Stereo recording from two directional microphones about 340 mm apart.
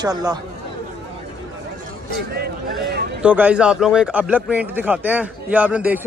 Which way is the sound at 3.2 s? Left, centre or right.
Centre.